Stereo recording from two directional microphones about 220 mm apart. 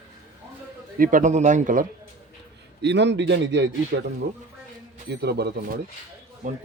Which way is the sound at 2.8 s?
50° right (ahead or behind).